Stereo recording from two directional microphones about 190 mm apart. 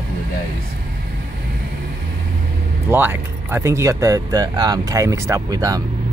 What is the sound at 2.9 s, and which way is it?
Speech, 10° right (ahead or behind).